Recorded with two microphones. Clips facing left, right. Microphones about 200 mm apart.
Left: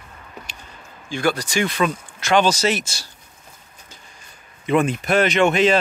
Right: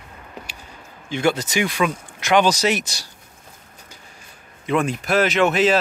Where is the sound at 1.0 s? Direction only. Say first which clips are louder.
Right 1 dB; 20° right (ahead or behind).